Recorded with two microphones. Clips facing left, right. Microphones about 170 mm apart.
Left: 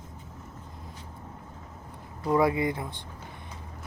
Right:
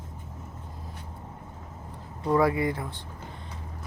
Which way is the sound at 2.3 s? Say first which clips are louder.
Right 1 dB; 15° left (ahead or behind).